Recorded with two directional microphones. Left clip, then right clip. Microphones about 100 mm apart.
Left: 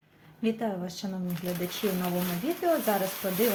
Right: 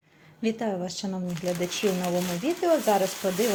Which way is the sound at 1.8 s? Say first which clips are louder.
Right 4 dB; 70° right (ahead or behind).